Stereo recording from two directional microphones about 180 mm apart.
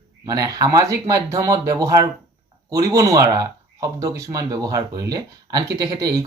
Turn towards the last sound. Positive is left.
turn(degrees=-20)  # may be behind; listen again after turning